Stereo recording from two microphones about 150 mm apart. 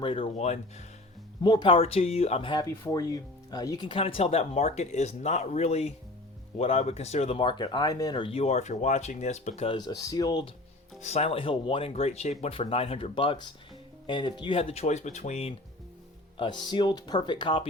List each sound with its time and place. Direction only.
0.0 s speech: 35° left (ahead or behind)
1.4 s speech: 30° left (ahead or behind)
2.8 s speech: 25° left (ahead or behind); by 9.6 s 50° left (ahead or behind)
9.6 s speech: 30° left (ahead or behind)
11.0 s speech: 45° left (ahead or behind)
16.4 s speech: 30° left (ahead or behind)